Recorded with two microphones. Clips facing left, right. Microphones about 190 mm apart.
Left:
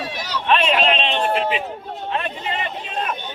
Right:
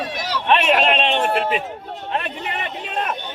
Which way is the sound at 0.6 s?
50° right (ahead or behind).